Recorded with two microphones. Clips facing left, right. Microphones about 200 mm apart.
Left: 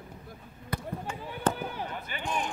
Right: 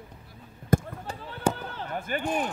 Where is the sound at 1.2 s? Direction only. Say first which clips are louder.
Right 2 dB; 15° left (ahead or behind).